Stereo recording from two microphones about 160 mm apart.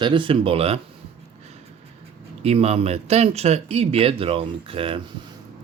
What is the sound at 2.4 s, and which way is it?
Speech, 40° right (ahead or behind).